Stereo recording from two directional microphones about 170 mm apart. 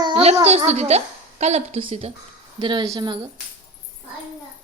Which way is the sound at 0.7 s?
40° right (ahead or behind).